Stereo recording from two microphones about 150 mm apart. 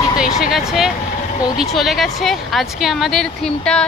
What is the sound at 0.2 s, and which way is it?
A woman's voice, 5° right (ahead or behind).